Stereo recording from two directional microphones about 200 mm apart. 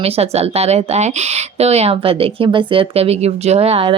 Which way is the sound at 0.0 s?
30° right (ahead or behind).